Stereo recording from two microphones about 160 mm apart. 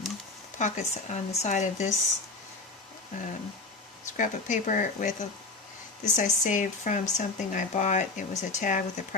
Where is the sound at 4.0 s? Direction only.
50° left (ahead or behind).